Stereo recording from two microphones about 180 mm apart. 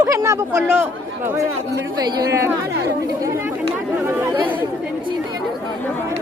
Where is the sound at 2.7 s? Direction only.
65° right (ahead or behind).